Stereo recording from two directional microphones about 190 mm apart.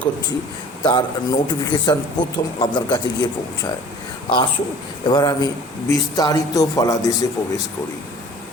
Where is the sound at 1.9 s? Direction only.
20° left (ahead or behind).